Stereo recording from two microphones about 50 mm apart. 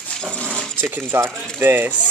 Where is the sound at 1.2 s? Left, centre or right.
Right.